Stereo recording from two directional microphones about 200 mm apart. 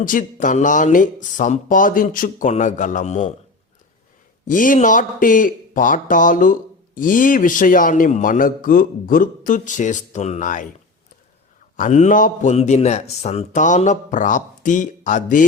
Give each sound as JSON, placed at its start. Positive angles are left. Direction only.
{"t": 0.0, "sound": "speech", "side_deg": 40}
{"t": 4.4, "sound": "speech", "side_deg": 40}
{"t": 11.8, "sound": "speech", "side_deg": 40}